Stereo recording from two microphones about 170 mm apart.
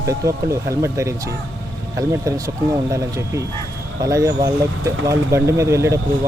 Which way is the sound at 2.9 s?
15° right (ahead or behind).